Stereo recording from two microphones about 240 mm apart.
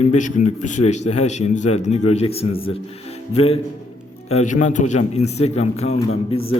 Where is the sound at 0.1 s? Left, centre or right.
Left.